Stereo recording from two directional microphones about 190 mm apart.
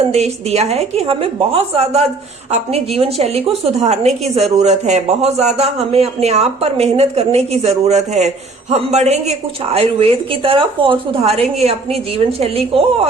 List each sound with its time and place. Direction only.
0.0 s a man's voice: 35° right (ahead or behind)